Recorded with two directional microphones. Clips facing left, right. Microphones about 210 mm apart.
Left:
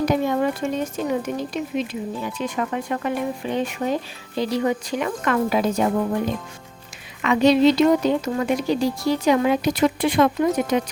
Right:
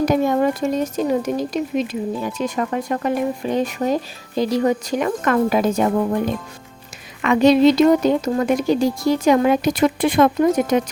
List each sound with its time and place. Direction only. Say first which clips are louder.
0.0 s speech: right 3 dB; 45° right (ahead or behind)
7.2 s speech: right 3 dB; 50° right (ahead or behind)